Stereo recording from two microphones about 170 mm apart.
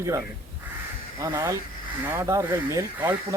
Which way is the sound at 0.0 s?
15° right (ahead or behind).